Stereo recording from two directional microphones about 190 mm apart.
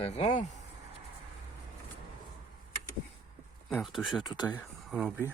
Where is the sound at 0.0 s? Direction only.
35° left (ahead or behind).